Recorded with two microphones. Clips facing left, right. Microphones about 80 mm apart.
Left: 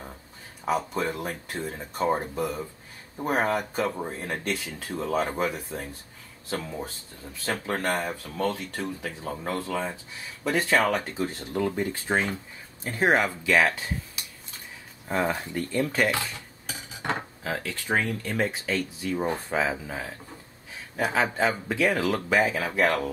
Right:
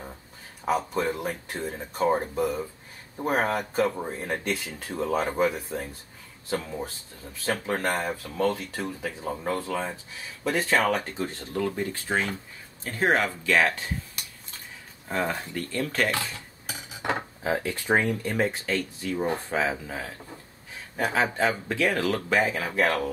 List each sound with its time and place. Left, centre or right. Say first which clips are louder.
0.7 s speech: right 1 dB; centre
12.1 s speech: left 1 dB; centre
15.7 s dishes: left 2 dB; centre
17.4 s speech: right 4 dB; centre
18.2 s speech: right 1 dB; centre